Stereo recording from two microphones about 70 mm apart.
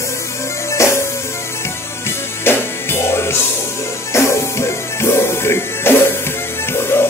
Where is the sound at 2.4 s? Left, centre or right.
Left.